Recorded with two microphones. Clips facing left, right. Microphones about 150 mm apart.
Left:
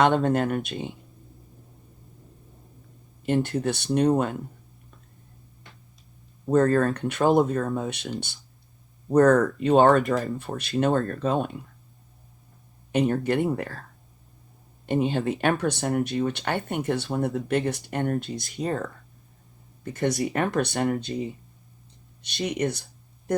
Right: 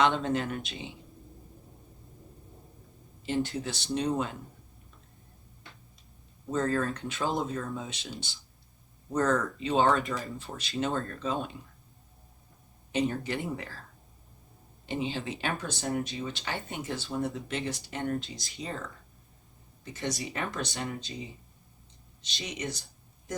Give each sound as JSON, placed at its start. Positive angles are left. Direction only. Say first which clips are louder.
{"t": 0.0, "sound": "speech", "louder": "left 6 dB", "side_deg": 50}
{"t": 3.2, "sound": "speech", "louder": "left 7 dB", "side_deg": 55}
{"t": 6.4, "sound": "speech", "louder": "left 9 dB", "side_deg": 55}
{"t": 12.9, "sound": "speech", "louder": "left 7 dB", "side_deg": 55}
{"t": 14.8, "sound": "speech", "louder": "left 9 dB", "side_deg": 55}